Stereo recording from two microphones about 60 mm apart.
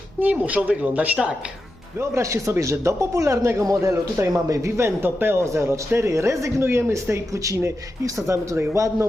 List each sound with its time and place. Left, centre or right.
0.2 s speech: right
2.0 s speech: right
5.0 s speech: right
5.5 s speech: right
6.6 s speech: right
8.7 s speech: right